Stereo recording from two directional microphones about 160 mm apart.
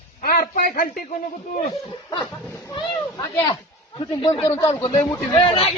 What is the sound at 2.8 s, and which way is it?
Speech, 25° left (ahead or behind).